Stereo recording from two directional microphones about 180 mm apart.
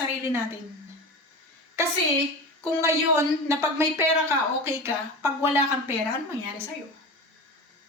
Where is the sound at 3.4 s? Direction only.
15° right (ahead or behind).